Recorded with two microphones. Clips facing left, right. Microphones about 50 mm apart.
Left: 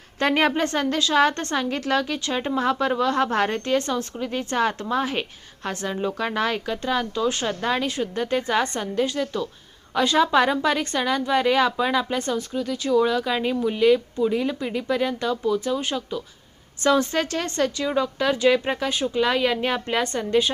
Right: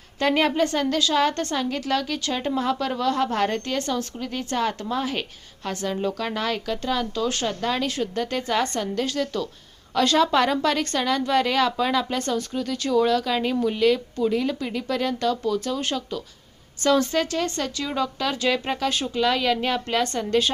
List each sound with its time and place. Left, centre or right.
0.2 s a woman's voice: left
5.9 s speech: centre
6.1 s a woman's voice: left
17.8 s speech: left